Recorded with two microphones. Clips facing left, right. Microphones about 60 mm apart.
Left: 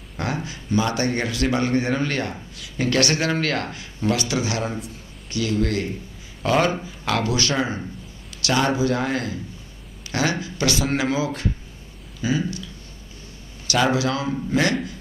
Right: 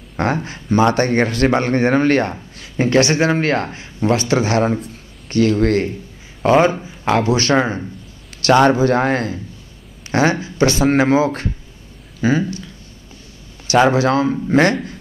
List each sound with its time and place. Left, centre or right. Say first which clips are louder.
0.2 s speech: right 8 dB; right
6.4 s a man's voice: right 7 dB; right
10.4 s a man's voice: right 8 dB; right
13.7 s speech: right 7 dB; right